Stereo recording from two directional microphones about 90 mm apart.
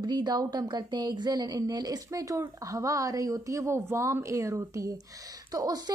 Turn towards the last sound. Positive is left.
turn(degrees=-40)  # may be behind; listen again after turning